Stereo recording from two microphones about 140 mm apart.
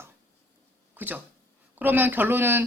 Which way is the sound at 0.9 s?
15° right (ahead or behind).